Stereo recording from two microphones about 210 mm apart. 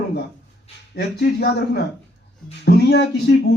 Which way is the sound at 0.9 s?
50° left (ahead or behind).